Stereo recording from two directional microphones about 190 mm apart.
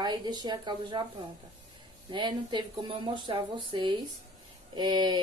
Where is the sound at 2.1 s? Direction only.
25° right (ahead or behind).